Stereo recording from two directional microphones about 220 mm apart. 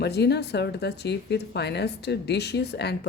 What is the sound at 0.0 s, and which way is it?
Speech, 50° left (ahead or behind).